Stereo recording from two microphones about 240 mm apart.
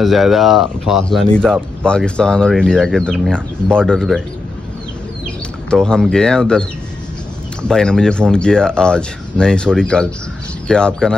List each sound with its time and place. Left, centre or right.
0.0 s speech: centre
5.7 s speech: centre
7.6 s speech: centre